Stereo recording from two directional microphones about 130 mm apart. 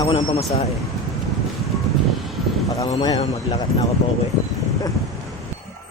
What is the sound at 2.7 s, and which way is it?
Speech, 30° left (ahead or behind).